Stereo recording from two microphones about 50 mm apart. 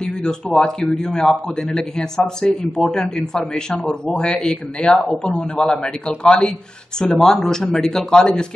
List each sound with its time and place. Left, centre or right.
0.0 s a man's voice: centre